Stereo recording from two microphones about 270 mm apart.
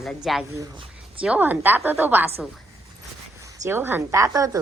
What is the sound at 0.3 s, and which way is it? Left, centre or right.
Speech, centre.